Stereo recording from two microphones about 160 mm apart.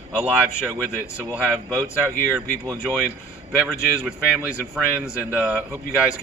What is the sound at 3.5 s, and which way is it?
A man's voice, 5° right (ahead or behind).